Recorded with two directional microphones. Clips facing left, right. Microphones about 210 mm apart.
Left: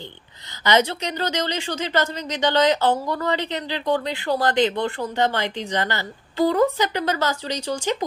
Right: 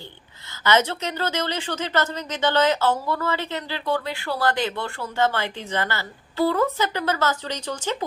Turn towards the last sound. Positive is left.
turn(degrees=10)  # may be behind; listen again after turning